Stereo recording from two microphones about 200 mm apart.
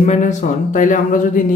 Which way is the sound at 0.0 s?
35° left (ahead or behind).